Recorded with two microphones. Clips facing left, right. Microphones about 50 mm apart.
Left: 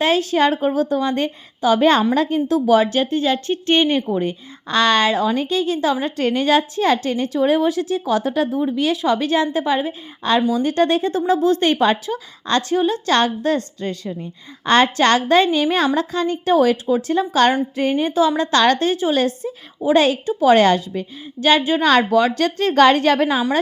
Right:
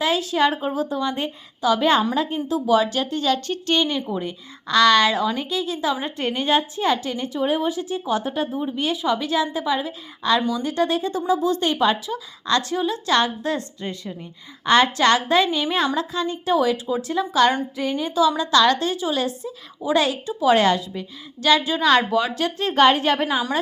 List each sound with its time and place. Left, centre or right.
0.0 s a woman's voice: left
2.7 s a woman's voice: left
9.8 s a woman's voice: left
21.4 s speech: left
21.8 s a woman's voice: left